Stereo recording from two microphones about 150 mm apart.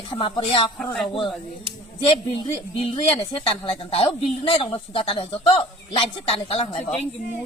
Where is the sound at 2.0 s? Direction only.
35° left (ahead or behind).